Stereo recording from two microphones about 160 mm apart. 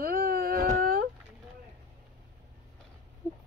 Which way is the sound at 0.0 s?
70° right (ahead or behind).